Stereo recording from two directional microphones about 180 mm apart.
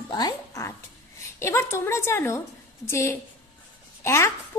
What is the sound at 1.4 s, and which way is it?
A woman's voice, 15° left (ahead or behind).